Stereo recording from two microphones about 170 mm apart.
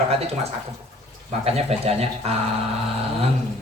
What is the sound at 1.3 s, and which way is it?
A man's voice, 40° right (ahead or behind).